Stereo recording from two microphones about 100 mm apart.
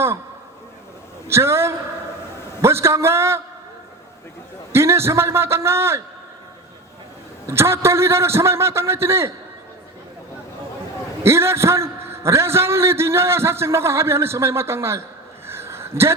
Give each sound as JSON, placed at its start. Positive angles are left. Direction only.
{"t": 1.3, "sound": "a man's voice", "side_deg": -25}
{"t": 4.7, "sound": "a man's voice", "side_deg": -25}
{"t": 7.4, "sound": "a man's voice", "side_deg": -25}
{"t": 11.2, "sound": "a man's voice", "side_deg": -25}
{"t": 15.4, "sound": "a sound", "side_deg": -25}